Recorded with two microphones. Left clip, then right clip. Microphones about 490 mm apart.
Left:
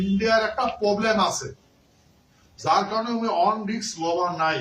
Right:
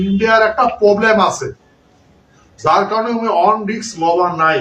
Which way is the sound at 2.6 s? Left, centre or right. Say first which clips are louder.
Right 9 dB; left.